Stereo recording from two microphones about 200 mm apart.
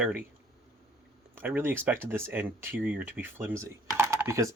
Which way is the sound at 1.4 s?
10° right (ahead or behind).